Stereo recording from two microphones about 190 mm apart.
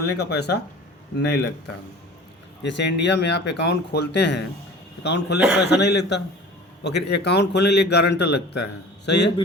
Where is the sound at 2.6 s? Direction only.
65° left (ahead or behind).